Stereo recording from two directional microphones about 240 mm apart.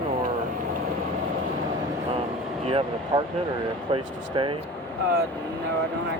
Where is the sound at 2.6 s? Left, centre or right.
Right.